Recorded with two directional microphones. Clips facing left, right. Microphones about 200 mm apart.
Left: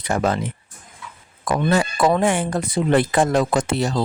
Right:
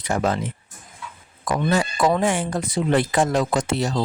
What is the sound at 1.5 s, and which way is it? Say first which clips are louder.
Speech: left 2 dB; 65° left (ahead or behind).